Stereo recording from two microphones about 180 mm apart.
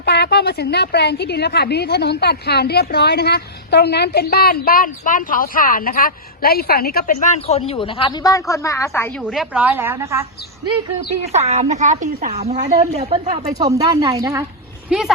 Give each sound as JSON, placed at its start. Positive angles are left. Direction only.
{"t": 0.0, "sound": "a woman's voice", "side_deg": 65}
{"t": 9.2, "sound": "a woman's voice", "side_deg": -5}
{"t": 11.3, "sound": "a woman's voice", "side_deg": -35}
{"t": 13.3, "sound": "speech", "side_deg": -20}
{"t": 14.8, "sound": "speech", "side_deg": 0}